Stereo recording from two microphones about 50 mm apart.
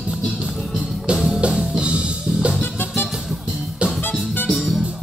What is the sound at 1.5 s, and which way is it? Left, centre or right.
Music, centre.